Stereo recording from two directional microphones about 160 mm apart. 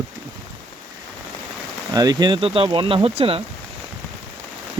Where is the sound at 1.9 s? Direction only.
25° right (ahead or behind).